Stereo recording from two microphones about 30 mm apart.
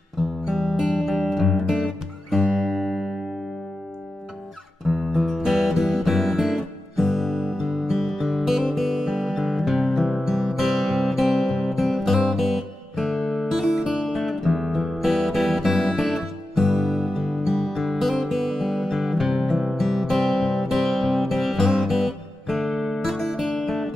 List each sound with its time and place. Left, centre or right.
0.5 s music: centre
2.8 s music: centre
5.1 s music: centre
5.4 s music: centre
8.1 s music: centre
8.9 s music: centre
16.2 s music: centre